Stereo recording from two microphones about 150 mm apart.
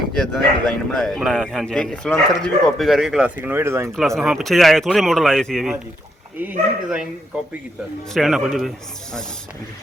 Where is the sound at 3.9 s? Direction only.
Centre (ahead or behind).